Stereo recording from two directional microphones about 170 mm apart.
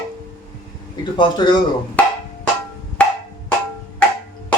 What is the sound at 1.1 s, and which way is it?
Speech, 25° left (ahead or behind).